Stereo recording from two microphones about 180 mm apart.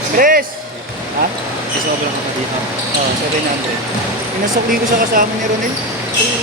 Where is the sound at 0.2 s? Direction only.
50° right (ahead or behind).